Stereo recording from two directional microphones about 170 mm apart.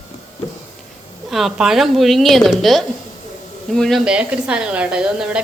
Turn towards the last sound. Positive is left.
turn(degrees=-5)  # may be behind; listen again after turning